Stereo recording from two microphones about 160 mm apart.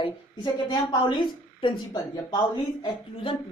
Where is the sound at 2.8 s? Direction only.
35° left (ahead or behind).